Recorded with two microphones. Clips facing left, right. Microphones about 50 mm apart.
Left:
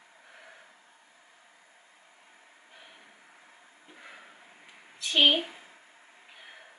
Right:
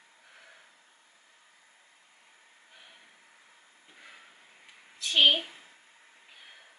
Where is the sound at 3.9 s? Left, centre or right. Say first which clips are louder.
Left 3 dB; centre.